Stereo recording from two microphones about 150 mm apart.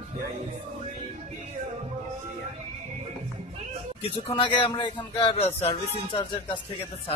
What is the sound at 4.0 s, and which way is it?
Speech, 40° left (ahead or behind).